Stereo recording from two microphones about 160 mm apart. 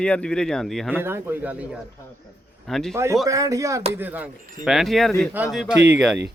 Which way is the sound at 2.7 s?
Centre (ahead or behind).